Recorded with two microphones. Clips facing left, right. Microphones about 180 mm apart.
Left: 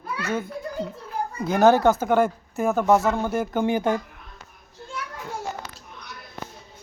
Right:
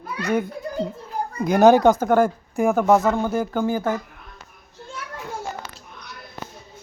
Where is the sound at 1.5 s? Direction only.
15° right (ahead or behind).